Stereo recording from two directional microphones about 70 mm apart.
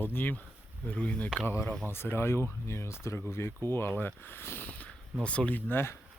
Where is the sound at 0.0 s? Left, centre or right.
Left.